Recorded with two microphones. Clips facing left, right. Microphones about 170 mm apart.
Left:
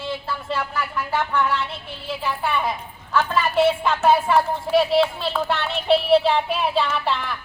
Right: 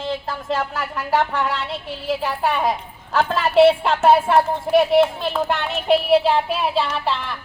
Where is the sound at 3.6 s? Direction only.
65° right (ahead or behind).